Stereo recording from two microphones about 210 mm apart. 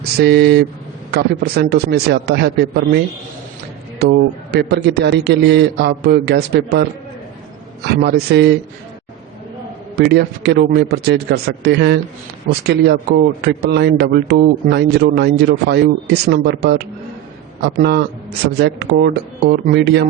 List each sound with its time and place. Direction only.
0.2 s speech: 50° right (ahead or behind)
4.0 s speech: 50° right (ahead or behind)
8.0 s speech: 50° right (ahead or behind)
9.9 s speech: 50° right (ahead or behind)